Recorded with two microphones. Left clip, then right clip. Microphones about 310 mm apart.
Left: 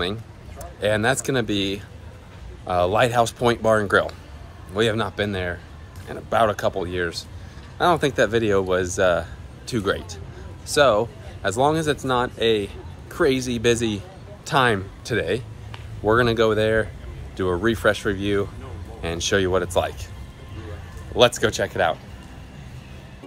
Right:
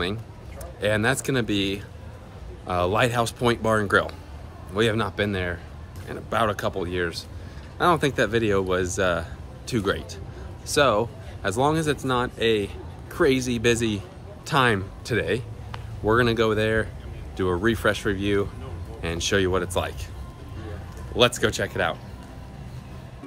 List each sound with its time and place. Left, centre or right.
0.0 s speech: centre
21.2 s speech: centre